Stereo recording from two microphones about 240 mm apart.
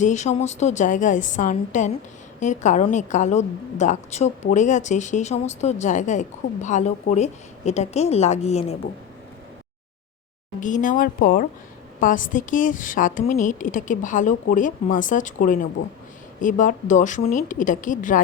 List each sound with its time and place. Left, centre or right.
0.0 s a woman's voice: left
10.6 s speech: left